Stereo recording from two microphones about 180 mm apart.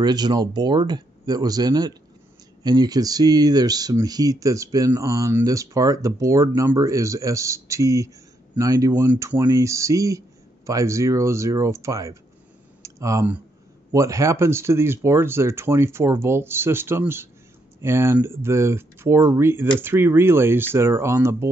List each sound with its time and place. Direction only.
0.0 s speech: 20° right (ahead or behind)